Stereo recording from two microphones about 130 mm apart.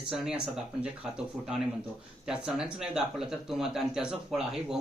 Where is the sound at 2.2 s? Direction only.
5° right (ahead or behind).